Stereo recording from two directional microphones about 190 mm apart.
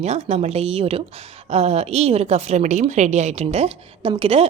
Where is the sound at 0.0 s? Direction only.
35° right (ahead or behind).